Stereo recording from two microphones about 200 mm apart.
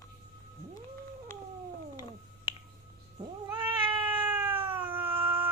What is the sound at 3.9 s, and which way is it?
Cat, 10° right (ahead or behind).